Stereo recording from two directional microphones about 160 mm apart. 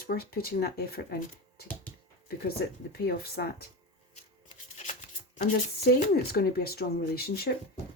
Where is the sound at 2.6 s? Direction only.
90° left.